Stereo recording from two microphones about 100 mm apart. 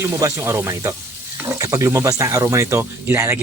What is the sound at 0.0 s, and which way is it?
Speech, 30° right (ahead or behind).